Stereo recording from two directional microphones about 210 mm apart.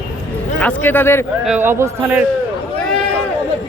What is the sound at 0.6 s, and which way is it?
Speech, 10° left (ahead or behind).